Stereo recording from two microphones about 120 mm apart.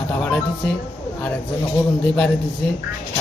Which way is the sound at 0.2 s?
5° left (ahead or behind).